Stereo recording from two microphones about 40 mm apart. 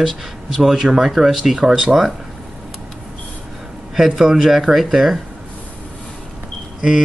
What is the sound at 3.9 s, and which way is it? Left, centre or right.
Speech, centre.